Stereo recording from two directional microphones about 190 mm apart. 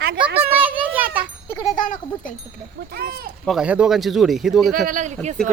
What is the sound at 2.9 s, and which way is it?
Speech, 55° right (ahead or behind).